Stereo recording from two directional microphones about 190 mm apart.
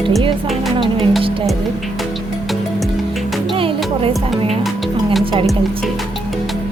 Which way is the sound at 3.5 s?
30° right (ahead or behind).